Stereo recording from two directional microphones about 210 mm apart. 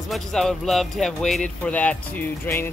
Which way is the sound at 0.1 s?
Centre (ahead or behind).